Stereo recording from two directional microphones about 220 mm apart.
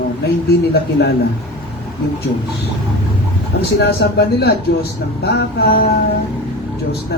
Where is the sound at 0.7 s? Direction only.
50° left (ahead or behind).